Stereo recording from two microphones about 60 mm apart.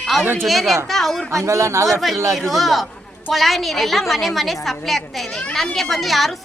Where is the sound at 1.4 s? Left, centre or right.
Right.